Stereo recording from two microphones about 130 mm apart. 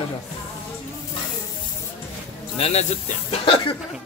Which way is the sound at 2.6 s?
55° left (ahead or behind).